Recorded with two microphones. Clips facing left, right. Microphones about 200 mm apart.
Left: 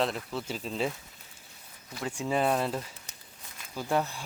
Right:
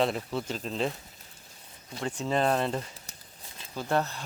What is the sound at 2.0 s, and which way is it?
Speech, 10° left (ahead or behind).